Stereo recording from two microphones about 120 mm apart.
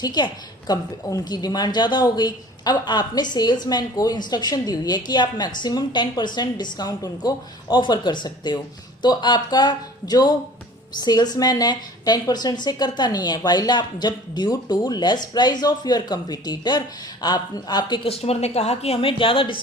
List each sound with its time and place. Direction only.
0.0 s a woman's voice: 35° left (ahead or behind)
18.1 s a woman's voice: 55° left (ahead or behind)